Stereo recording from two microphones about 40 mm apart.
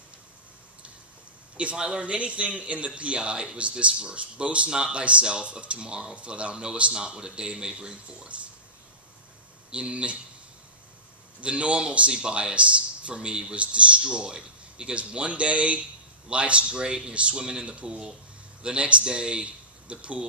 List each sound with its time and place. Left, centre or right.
1.6 s speech: right
9.7 s speech: right
11.4 s a man's voice: right